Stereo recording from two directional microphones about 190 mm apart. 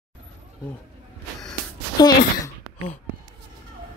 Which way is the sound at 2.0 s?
20° left (ahead or behind).